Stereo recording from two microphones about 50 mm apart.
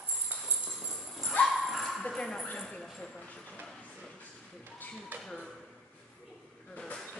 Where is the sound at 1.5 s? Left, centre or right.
Centre.